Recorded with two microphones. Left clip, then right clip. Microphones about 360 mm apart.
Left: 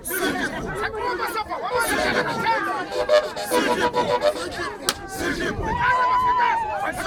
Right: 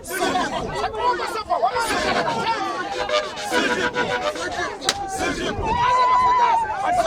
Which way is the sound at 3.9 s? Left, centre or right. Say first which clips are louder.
Left 2 dB; centre.